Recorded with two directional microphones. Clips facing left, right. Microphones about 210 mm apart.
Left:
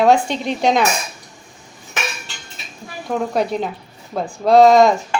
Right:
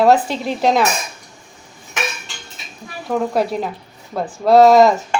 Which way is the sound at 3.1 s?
5° right (ahead or behind).